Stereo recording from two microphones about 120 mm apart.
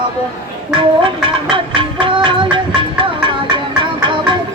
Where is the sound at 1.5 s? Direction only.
45° right (ahead or behind).